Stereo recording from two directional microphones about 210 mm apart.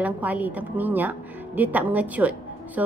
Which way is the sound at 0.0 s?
5° right (ahead or behind).